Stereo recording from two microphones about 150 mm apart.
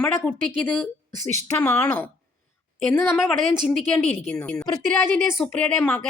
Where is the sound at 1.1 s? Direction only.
50° right (ahead or behind).